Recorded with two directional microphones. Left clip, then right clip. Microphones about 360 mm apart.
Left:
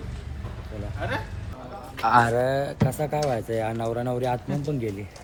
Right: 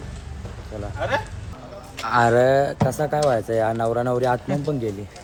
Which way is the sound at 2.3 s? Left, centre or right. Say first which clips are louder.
Right 7 dB; centre.